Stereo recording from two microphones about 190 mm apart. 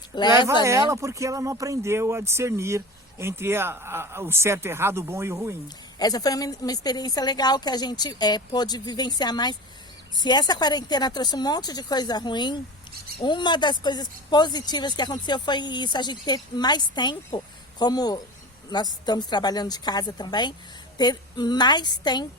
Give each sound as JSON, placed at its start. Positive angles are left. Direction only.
{"t": 0.2, "sound": "speech", "side_deg": 20}
{"t": 0.6, "sound": "speech", "side_deg": -15}
{"t": 5.6, "sound": "speech", "side_deg": 20}